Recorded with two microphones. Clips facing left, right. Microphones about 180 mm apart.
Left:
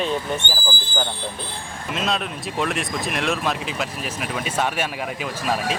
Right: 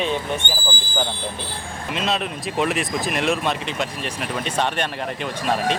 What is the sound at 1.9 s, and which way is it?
Speech, centre (ahead or behind).